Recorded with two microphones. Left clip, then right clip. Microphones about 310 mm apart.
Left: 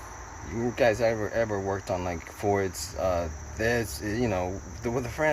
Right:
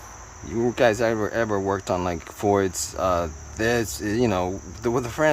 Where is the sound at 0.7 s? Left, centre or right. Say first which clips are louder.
Right 3 dB; centre.